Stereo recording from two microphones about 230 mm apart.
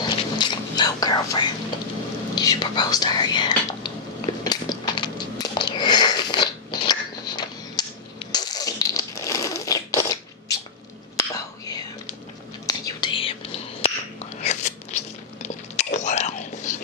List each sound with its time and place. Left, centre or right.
0.0 s whispering: centre
2.3 s speech: centre
4.5 s a sound: centre
8.3 s zipper: centre
11.1 s whispering: centre
14.4 s a sound: left
15.4 s whispering: left